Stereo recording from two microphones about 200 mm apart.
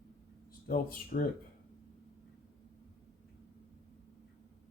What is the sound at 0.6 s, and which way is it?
Speech, 45° left (ahead or behind).